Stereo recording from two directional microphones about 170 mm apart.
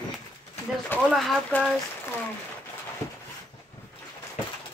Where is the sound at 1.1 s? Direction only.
Centre (ahead or behind).